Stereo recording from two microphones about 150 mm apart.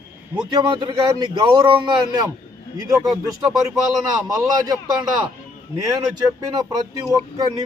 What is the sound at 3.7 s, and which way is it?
Speech, centre (ahead or behind).